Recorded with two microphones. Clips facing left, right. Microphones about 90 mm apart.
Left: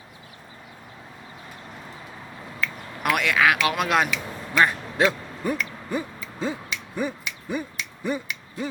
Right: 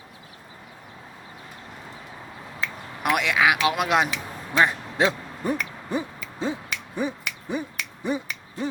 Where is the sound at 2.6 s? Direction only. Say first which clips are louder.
Left 1 dB; 20° right (ahead or behind).